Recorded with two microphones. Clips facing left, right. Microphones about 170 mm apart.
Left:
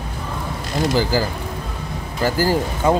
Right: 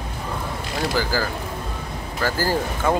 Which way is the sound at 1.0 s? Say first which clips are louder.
Left 4 dB; 15° left (ahead or behind).